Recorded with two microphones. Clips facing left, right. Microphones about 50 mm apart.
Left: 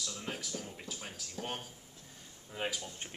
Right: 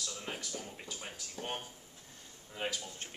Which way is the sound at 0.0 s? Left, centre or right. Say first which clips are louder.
Left 1 dB; centre.